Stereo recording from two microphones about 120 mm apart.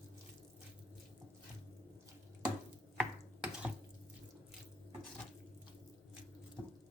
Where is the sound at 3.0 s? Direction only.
5° right (ahead or behind).